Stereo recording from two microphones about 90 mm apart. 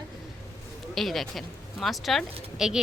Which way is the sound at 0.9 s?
Centre (ahead or behind).